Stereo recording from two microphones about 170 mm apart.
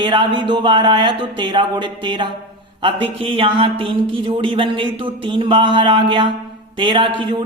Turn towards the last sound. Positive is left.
turn(degrees=-30)  # may be behind; listen again after turning